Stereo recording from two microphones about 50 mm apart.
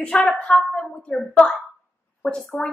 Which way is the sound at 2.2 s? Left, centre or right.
Centre.